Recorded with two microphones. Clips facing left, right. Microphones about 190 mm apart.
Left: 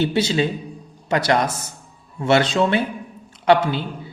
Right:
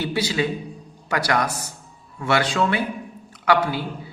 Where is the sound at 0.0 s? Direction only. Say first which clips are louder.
Left 4 dB; 25° left (ahead or behind).